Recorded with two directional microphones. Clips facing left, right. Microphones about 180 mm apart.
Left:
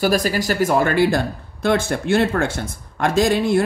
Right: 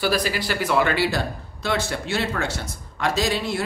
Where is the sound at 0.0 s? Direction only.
45° left (ahead or behind).